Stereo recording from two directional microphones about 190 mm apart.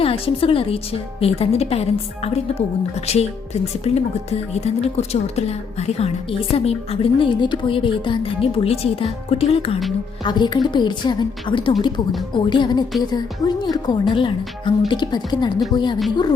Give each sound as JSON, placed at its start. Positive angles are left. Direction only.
{"t": 0.0, "sound": "a woman's voice", "side_deg": 30}